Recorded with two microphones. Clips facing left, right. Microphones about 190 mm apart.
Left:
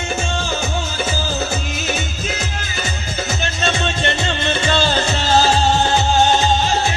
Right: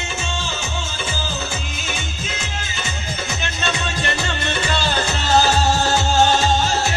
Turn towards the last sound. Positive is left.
turn(degrees=20)  # may be behind; listen again after turning